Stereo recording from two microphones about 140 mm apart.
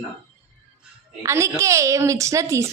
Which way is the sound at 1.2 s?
20° right (ahead or behind).